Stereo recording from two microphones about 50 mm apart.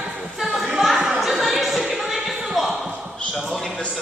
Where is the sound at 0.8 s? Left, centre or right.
Centre.